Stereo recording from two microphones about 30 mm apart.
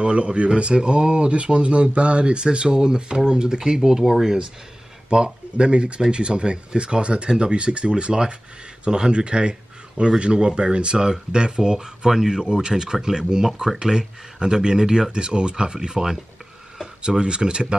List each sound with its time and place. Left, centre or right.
0.0 s speech: right; by 4.4 s centre
5.1 s speech: right
17.1 s speech: right